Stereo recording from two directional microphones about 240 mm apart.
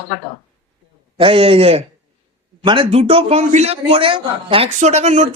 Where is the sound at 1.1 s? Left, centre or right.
Right.